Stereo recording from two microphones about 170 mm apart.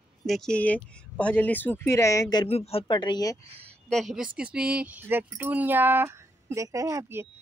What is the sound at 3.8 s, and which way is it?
A woman's voice, centre (ahead or behind).